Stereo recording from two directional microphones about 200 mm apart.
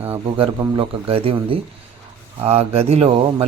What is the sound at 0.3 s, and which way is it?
Speech, 25° right (ahead or behind).